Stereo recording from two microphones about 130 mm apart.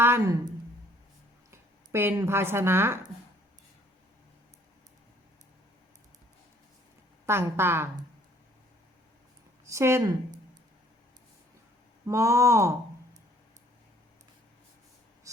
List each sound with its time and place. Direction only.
0.0 s speech: 20° right (ahead or behind)
1.5 s speech: 20° right (ahead or behind)
7.3 s speech: 20° right (ahead or behind)
9.6 s speech: 20° right (ahead or behind)
12.0 s speech: 25° right (ahead or behind)